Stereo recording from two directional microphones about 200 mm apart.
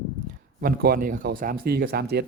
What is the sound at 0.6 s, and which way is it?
Speech, 45° right (ahead or behind).